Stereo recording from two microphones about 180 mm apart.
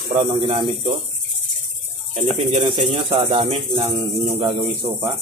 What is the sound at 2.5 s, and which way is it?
Speech, 35° right (ahead or behind).